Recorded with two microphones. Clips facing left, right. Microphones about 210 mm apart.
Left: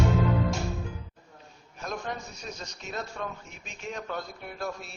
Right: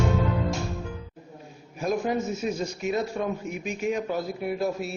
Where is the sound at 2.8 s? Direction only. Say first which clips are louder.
Right 8 dB; 15° right (ahead or behind).